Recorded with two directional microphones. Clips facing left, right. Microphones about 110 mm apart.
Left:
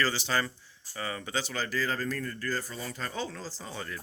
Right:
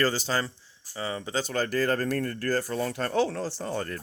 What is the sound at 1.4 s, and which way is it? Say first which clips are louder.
Speech: right 6 dB; 45° right (ahead or behind).